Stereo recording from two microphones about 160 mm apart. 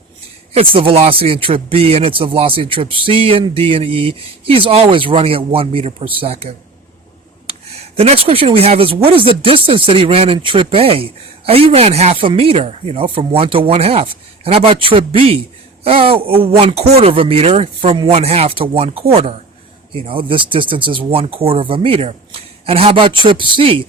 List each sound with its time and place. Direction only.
0.5 s speech: 35° right (ahead or behind)
7.9 s speech: 35° right (ahead or behind)